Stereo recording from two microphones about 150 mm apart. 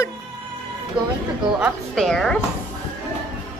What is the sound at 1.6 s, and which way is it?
Speech, centre (ahead or behind).